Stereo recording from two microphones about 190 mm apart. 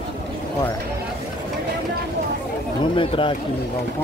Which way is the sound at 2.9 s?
25° left (ahead or behind).